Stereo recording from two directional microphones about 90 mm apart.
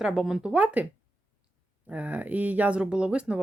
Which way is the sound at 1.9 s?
15° right (ahead or behind).